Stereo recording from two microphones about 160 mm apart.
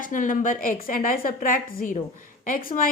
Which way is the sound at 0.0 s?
55° left (ahead or behind).